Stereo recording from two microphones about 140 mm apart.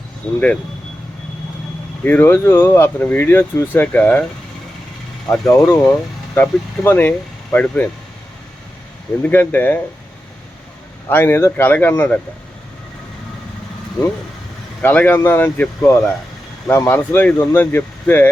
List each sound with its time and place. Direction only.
0.3 s speech: 10° left (ahead or behind)
2.0 s speech: 15° left (ahead or behind)
5.3 s speech: 20° left (ahead or behind)
9.2 s speech: 15° left (ahead or behind)
11.1 s speech: 15° left (ahead or behind)
14.8 s speech: 10° left (ahead or behind)